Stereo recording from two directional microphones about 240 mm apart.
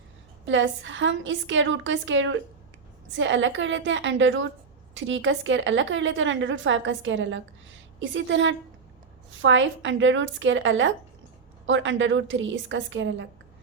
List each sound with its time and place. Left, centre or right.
0.4 s a woman's voice: right